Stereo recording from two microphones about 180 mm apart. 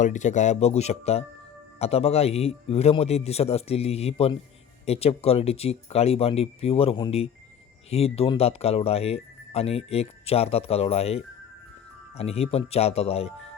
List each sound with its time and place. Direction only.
0.0 s speech: 40° left (ahead or behind)